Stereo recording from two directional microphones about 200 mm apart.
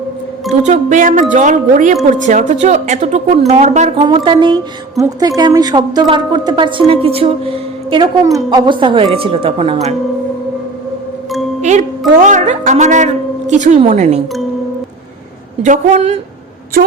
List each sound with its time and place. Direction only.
0.6 s a woman's voice: 35° right (ahead or behind)
11.6 s music: 35° right (ahead or behind)
12.3 s a woman's voice: 35° right (ahead or behind)
15.6 s a woman's voice: 35° right (ahead or behind)